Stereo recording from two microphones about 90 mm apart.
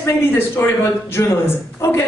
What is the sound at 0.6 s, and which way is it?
Speech, 25° left (ahead or behind).